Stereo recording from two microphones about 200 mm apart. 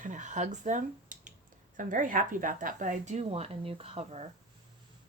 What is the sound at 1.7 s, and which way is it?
Speech, 40° right (ahead or behind).